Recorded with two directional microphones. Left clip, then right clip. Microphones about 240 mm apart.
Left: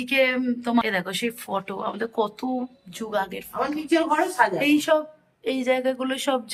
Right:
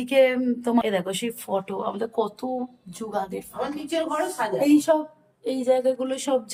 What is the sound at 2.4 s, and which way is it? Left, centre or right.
Speech, centre.